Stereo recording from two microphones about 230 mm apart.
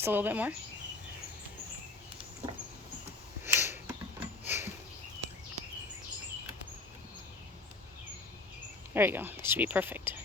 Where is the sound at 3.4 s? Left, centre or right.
Centre.